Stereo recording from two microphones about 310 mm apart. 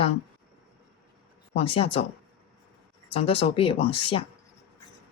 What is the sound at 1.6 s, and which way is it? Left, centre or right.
Speech, centre.